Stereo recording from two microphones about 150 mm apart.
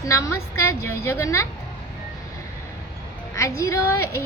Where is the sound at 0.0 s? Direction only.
20° left (ahead or behind).